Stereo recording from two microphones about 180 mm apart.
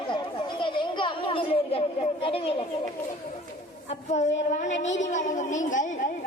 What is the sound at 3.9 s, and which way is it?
A woman's voice, 40° left (ahead or behind).